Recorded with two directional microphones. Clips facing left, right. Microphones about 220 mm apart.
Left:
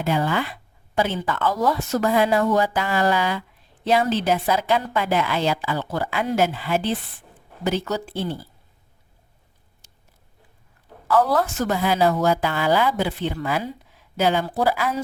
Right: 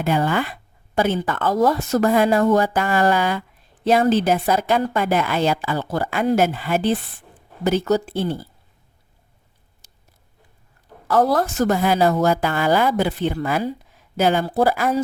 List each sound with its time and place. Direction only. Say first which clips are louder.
0.0 s speech: right 2 dB; 50° right (ahead or behind)
11.1 s speech: right 2 dB; 40° right (ahead or behind)